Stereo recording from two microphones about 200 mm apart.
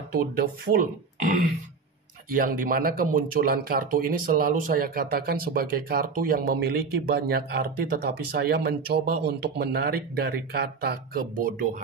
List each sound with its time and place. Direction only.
0.4 s speech: 45° right (ahead or behind)